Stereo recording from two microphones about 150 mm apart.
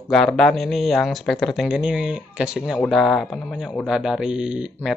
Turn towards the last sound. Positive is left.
turn(degrees=-5)  # may be behind; listen again after turning